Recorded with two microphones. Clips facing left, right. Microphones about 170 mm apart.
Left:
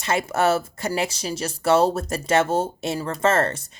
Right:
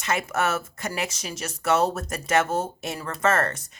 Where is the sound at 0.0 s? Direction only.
30° left (ahead or behind).